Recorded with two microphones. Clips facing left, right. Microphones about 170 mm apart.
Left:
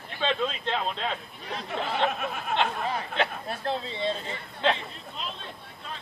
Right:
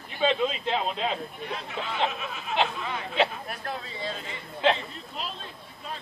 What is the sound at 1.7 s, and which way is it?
Speech, 55° left (ahead or behind).